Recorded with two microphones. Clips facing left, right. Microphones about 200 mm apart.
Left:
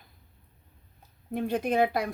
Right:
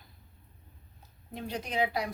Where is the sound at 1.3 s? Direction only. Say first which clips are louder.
Left 7 dB; 55° left (ahead or behind).